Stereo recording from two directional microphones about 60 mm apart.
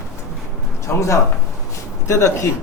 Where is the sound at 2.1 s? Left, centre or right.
Left.